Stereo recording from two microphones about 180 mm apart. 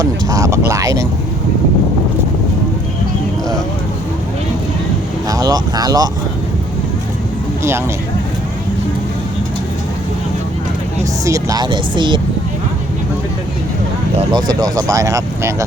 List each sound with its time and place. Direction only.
0.0 s speech: 20° right (ahead or behind)
5.3 s speech: 20° right (ahead or behind)
11.3 s speech: 20° right (ahead or behind)
14.2 s speech: 25° right (ahead or behind)